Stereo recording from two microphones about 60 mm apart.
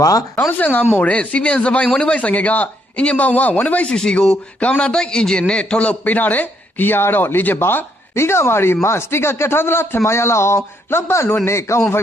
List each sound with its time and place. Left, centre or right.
0.0 s speech: left
0.6 s a man's voice: left
3.8 s a man's voice: centre; by 11.8 s left